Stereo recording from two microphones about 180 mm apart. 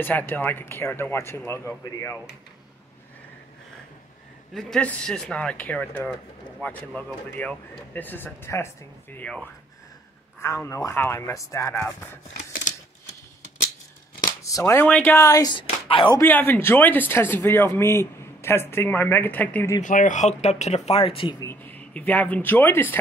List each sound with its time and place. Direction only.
0.0 s speech: 10° left (ahead or behind)
4.6 s speech: 5° left (ahead or behind)
14.4 s speech: 15° left (ahead or behind)
16.2 s speech: 10° left (ahead or behind)
19.8 s speech: 45° left (ahead or behind); by 21.5 s 25° left (ahead or behind)
21.5 s speech: 10° left (ahead or behind)